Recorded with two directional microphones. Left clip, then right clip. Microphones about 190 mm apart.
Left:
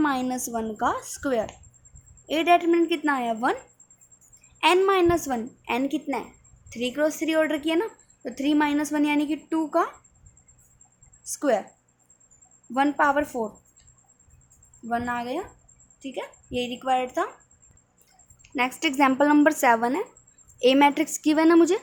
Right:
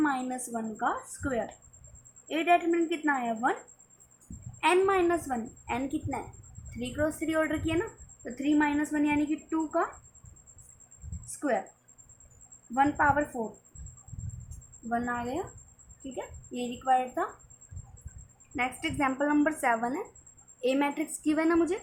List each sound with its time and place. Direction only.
0.0 s a woman's voice: 60° left (ahead or behind)
4.6 s a woman's voice: 55° left (ahead or behind)
11.3 s a woman's voice: 60° left (ahead or behind)
12.7 s a woman's voice: 60° left (ahead or behind)
14.8 s a woman's voice: 55° left (ahead or behind)
18.5 s a woman's voice: 55° left (ahead or behind)